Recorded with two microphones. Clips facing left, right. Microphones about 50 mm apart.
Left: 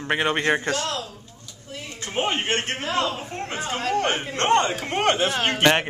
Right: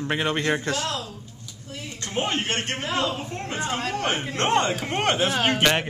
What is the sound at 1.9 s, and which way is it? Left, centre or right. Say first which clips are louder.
Speech: left 1 dB; centre.